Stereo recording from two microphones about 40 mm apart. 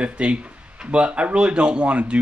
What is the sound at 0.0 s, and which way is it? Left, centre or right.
Speech, right.